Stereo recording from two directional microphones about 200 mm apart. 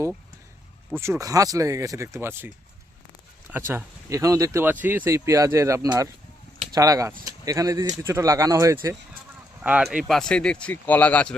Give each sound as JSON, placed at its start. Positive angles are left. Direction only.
{"t": 0.9, "sound": "speech", "side_deg": -15}